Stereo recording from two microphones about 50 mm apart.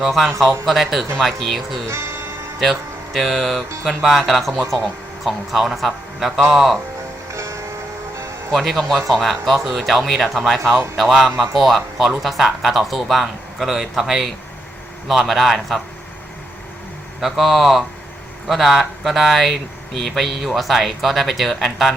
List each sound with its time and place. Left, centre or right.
0.0 s speech: centre
1.9 s music: right
2.6 s speech: centre
7.3 s music: right
8.5 s speech: centre
17.2 s speech: centre